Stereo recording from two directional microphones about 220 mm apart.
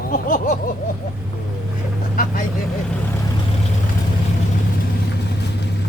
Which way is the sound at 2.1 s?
40° left (ahead or behind).